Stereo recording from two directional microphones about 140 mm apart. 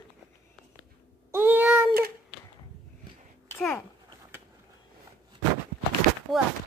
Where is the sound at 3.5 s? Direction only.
15° left (ahead or behind).